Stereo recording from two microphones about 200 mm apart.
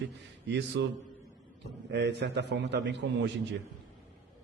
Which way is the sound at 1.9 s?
60° right (ahead or behind).